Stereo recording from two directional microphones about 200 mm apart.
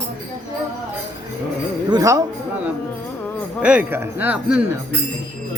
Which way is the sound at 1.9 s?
15° right (ahead or behind).